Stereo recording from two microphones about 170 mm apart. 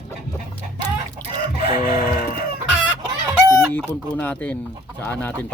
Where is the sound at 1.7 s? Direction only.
50° left (ahead or behind).